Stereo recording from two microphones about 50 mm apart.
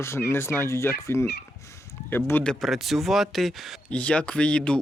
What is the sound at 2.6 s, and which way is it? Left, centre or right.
Speech, centre.